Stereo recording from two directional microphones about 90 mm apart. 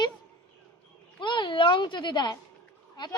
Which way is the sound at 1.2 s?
60° left (ahead or behind).